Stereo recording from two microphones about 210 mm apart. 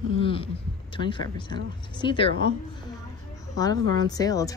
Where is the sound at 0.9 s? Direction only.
25° left (ahead or behind).